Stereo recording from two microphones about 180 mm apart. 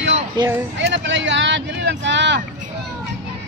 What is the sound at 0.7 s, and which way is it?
Speech, 80° right.